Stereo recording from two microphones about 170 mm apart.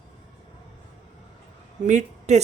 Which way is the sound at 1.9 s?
45° right (ahead or behind).